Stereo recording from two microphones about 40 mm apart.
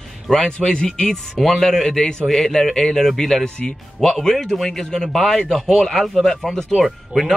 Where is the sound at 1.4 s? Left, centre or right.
Centre.